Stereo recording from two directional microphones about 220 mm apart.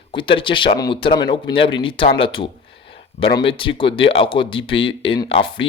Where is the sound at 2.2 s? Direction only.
25° left (ahead or behind).